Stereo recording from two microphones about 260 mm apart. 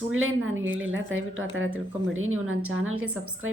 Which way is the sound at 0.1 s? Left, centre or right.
Right.